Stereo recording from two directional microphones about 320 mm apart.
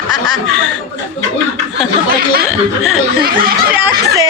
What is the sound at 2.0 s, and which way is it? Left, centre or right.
Speech, right.